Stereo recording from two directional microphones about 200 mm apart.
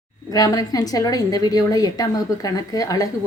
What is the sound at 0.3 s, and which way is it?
A woman's voice, 20° left (ahead or behind).